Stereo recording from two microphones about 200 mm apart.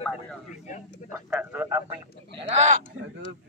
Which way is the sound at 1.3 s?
10° right (ahead or behind).